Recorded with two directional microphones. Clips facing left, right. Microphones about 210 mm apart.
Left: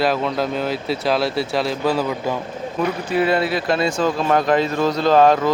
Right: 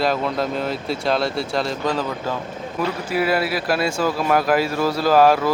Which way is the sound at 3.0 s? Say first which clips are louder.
Left 2 dB; 5° right (ahead or behind).